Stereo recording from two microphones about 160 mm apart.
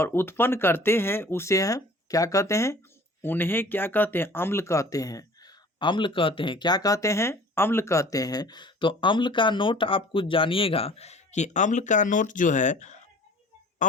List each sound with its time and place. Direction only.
0.0 s speech: 15° left (ahead or behind); by 13.0 s 50° left (ahead or behind)